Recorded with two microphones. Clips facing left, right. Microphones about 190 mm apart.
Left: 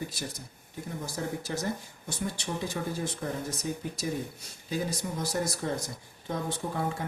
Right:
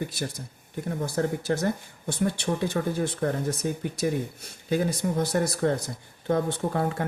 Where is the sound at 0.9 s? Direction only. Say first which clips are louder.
Right 8 dB; 60° right (ahead or behind).